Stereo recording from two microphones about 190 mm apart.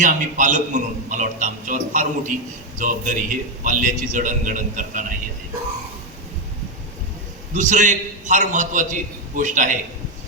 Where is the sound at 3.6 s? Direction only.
45° right (ahead or behind).